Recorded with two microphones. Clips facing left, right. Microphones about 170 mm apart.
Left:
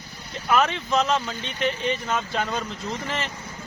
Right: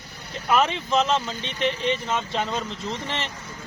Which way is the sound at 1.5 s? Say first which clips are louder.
Right 1 dB; 35° right (ahead or behind).